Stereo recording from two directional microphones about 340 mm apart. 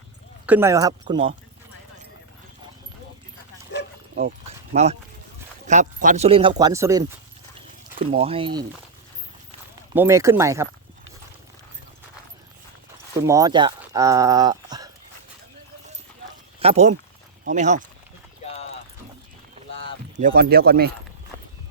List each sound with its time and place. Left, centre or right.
0.4 s speech: centre
4.1 s a sound: right
5.6 s speech: right
9.9 s speech: centre
13.2 s speech: centre
16.6 s speech: centre
19.8 s speech: right